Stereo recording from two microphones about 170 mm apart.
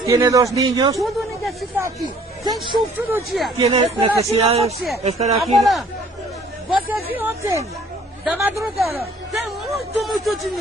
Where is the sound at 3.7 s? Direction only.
35° right (ahead or behind).